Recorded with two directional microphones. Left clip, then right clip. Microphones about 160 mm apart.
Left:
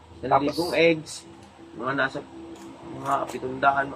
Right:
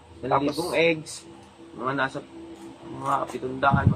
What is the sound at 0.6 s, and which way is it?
A man's voice, 20° right (ahead or behind).